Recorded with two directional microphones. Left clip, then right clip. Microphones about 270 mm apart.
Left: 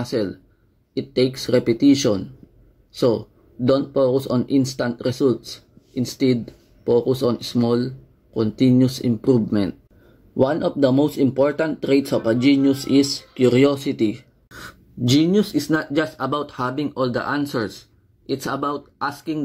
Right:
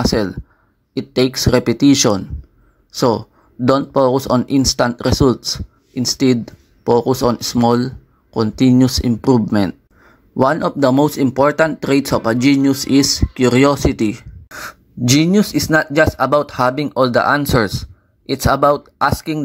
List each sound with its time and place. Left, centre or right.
0.0 s speech: right